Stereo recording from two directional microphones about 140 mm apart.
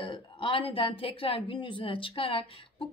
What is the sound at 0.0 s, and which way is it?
A woman's voice, 35° left (ahead or behind).